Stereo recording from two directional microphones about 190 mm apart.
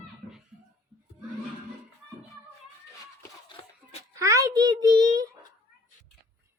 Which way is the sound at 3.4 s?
30° left (ahead or behind).